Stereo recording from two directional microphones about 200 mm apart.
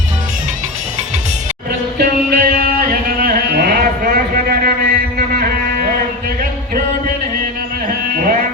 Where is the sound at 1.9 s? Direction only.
45° right (ahead or behind).